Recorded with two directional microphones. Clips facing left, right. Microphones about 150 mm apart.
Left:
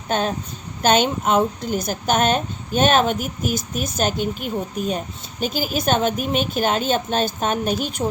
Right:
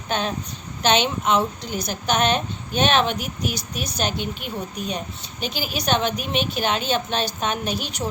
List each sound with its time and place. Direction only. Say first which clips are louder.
0.1 s a woman's voice: left 3 dB; 45° left (ahead or behind)